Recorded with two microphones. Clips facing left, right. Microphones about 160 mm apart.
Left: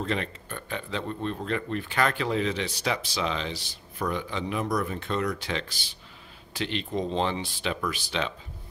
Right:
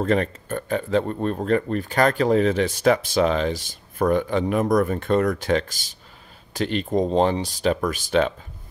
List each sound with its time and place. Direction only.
0.0 s speech: 45° right (ahead or behind)